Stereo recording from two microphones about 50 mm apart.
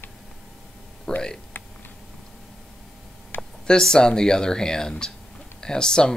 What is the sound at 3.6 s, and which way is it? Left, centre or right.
Speech, centre.